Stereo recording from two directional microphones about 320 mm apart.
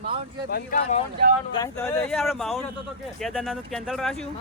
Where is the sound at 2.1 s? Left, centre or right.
Centre.